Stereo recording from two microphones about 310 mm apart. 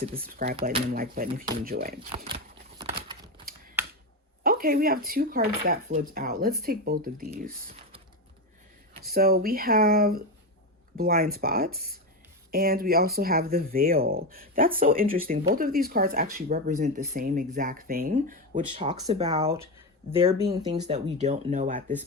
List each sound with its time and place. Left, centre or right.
0.0 s speech: right
0.8 s speech: right
2.7 s a sound: centre
4.4 s speech: right
8.9 s speech: right